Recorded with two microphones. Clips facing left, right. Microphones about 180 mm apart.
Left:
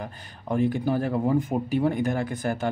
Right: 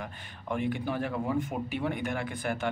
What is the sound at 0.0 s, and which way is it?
Speech, 40° left (ahead or behind).